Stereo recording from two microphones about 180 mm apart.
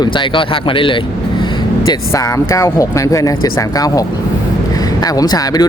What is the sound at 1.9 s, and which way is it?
Speech, 15° left (ahead or behind).